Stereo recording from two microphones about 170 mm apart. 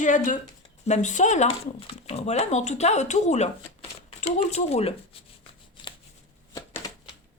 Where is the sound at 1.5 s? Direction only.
35° left (ahead or behind).